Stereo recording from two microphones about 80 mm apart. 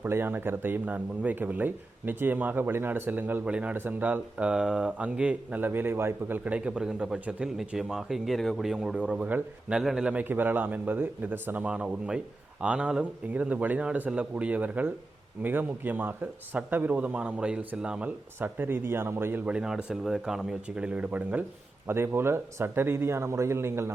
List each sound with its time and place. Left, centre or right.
0.0 s a man's voice: right
6.4 s a man's voice: centre
10.2 s a man's voice: right
18.3 s speech: right
19.5 s a man's voice: centre
21.8 s speech: right